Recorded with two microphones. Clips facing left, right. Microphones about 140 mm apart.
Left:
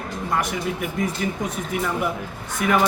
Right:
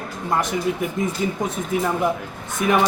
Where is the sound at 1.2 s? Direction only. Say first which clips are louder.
Right 2 dB; 25° right (ahead or behind).